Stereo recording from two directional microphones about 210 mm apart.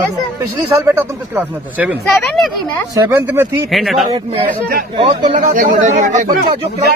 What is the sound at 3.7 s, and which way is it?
Speech, centre (ahead or behind).